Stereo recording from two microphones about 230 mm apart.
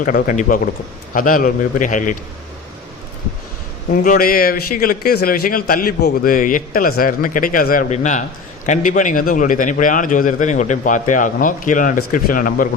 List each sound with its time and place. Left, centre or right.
0.0 s a man's voice: left
4.0 s a man's voice: left